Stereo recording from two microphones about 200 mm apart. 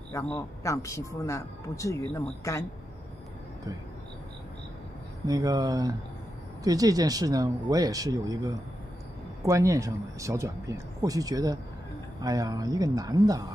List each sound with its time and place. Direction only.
0.1 s speech: 15° left (ahead or behind)
5.2 s speech: 20° right (ahead or behind)